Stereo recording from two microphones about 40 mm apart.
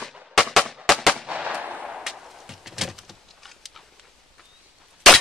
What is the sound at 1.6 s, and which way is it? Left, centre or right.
Gunshot, right.